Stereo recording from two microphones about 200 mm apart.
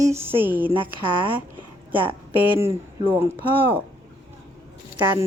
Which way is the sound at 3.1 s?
10° right (ahead or behind).